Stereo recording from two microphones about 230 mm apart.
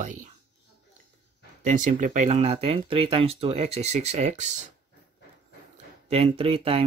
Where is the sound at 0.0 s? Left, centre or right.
Right.